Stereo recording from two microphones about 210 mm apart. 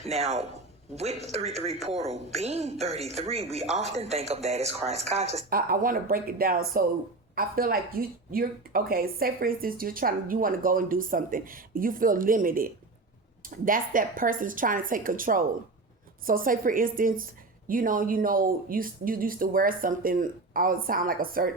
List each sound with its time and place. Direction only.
0.0 s speech: 30° right (ahead or behind)
5.5 s speech: 45° right (ahead or behind)